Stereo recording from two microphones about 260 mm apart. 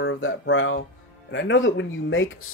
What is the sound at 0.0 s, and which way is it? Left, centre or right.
Speech, left.